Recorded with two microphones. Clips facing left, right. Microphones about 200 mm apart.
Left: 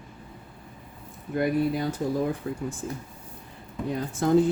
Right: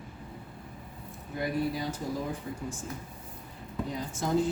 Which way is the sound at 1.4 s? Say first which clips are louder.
Left 6 dB; 60° left (ahead or behind).